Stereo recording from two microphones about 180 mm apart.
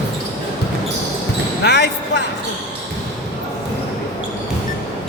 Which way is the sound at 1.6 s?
65° left (ahead or behind).